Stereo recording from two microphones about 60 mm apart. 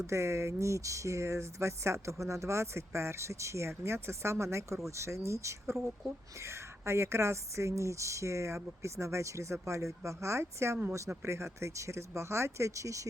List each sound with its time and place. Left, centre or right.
0.1 s speech: right